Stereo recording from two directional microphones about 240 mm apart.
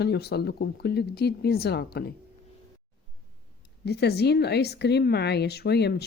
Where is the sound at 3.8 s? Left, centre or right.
Left.